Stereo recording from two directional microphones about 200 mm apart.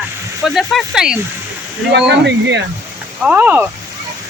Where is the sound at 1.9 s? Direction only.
60° right (ahead or behind).